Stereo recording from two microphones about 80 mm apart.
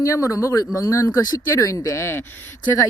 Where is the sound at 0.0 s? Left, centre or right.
Left.